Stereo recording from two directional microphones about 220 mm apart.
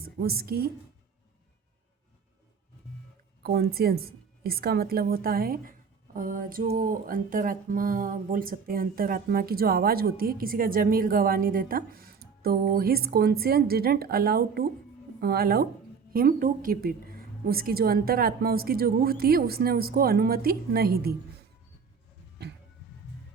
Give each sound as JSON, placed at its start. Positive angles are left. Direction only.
{"t": 0.0, "sound": "a woman's voice", "side_deg": -45}
{"t": 3.4, "sound": "a woman's voice", "side_deg": -45}
{"t": 6.1, "sound": "music", "side_deg": -40}
{"t": 15.2, "sound": "a woman's voice", "side_deg": -45}